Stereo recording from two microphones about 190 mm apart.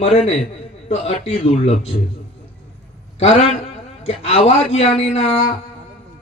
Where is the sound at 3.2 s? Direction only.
35° left (ahead or behind).